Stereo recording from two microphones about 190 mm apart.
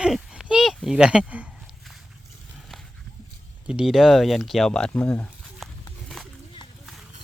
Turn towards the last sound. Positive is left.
turn(degrees=0)  # may be behind; listen again after turning